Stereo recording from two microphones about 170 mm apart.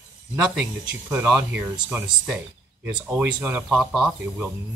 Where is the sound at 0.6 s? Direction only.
10° right (ahead or behind).